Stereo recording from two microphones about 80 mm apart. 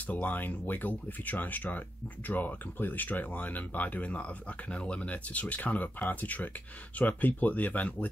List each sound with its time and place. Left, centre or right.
0.0 s speech: left